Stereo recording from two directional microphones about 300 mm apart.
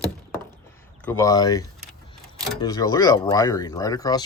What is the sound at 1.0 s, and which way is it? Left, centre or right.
Speech, centre.